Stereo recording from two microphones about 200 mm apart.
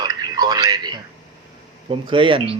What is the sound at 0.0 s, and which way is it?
A man's voice, 20° right (ahead or behind).